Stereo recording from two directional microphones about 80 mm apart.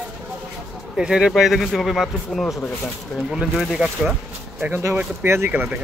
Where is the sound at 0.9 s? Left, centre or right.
Centre.